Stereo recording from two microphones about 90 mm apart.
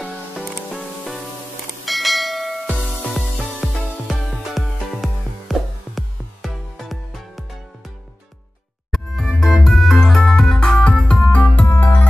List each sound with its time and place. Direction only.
0.7 s music: centre (ahead or behind)
1.9 s bell: centre (ahead or behind)
2.8 s music: centre (ahead or behind)
8.9 s music: centre (ahead or behind); by 12.1 s 20° left (ahead or behind)